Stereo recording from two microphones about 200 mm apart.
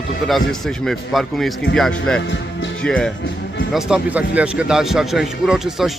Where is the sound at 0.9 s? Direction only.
Centre (ahead or behind).